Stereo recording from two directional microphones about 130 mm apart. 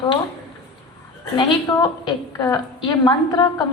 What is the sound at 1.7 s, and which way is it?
A woman's voice, 30° left (ahead or behind).